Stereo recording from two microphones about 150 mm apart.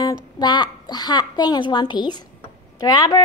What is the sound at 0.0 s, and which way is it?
A woman's voice, 25° left (ahead or behind).